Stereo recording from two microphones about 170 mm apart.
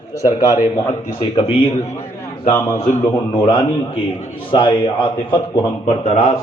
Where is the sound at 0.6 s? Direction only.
25° left (ahead or behind).